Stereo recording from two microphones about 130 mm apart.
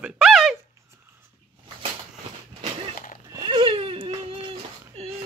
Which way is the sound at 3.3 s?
35° right (ahead or behind).